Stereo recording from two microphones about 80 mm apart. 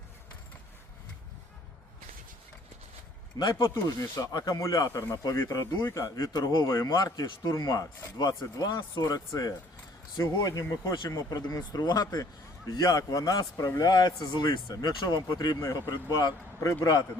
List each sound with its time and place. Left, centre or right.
3.3 s speech: left
3.6 s speech: left
4.9 s speech: left
6.1 s speech: left
6.8 s speech: left